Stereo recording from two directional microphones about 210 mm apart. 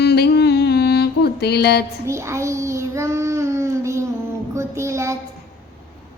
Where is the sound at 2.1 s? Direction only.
15° right (ahead or behind).